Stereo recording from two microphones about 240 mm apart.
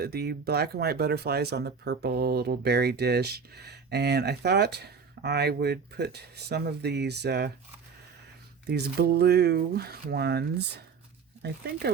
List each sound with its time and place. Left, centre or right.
0.0 s speech: right
8.6 s speech: right
11.4 s speech: right